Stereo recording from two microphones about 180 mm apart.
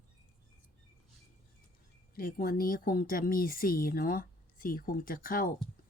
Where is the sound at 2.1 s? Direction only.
55° left (ahead or behind).